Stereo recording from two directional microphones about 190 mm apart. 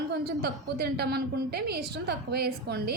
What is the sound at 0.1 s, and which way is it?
A woman's voice, 60° right (ahead or behind).